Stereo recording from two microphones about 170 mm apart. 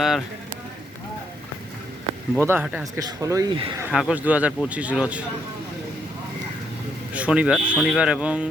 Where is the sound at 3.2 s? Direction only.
20° right (ahead or behind).